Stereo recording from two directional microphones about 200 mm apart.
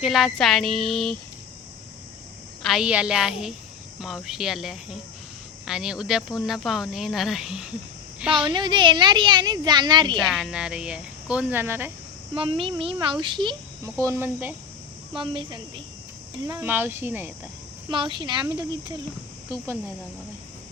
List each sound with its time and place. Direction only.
0.0 s speech: centre (ahead or behind)
2.6 s speech: 5° right (ahead or behind)
8.5 s a woman's voice: 25° right (ahead or behind)
10.2 s speech: centre (ahead or behind)
12.3 s a woman's voice: 25° right (ahead or behind)
14.0 s speech: 15° right (ahead or behind)
15.2 s a woman's voice: 25° right (ahead or behind)
16.6 s speech: 10° right (ahead or behind)
17.9 s a woman's voice: 25° right (ahead or behind)